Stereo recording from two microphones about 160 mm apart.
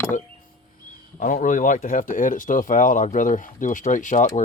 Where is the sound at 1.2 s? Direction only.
55° left (ahead or behind).